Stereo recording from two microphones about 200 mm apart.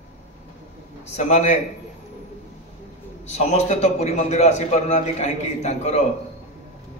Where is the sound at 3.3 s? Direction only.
35° left (ahead or behind).